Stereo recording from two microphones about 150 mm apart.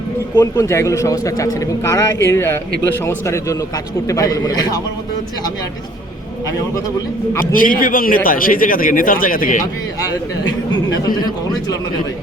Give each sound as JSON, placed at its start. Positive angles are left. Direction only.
{"t": 0.3, "sound": "speech", "side_deg": 20}
{"t": 7.5, "sound": "a man's voice", "side_deg": 65}
{"t": 10.4, "sound": "speech", "side_deg": 25}